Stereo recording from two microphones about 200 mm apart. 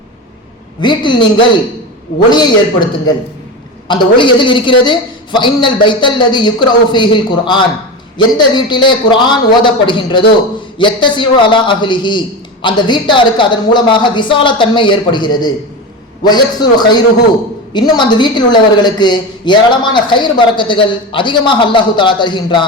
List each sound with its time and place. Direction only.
0.8 s a woman's voice: 25° left (ahead or behind)
3.8 s a woman's voice: 25° left (ahead or behind)